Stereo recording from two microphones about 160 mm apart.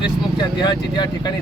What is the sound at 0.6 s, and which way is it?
Speech, 25° left (ahead or behind).